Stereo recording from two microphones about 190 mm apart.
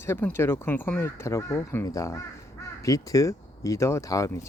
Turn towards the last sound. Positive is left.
turn(degrees=15)  # may be behind; listen again after turning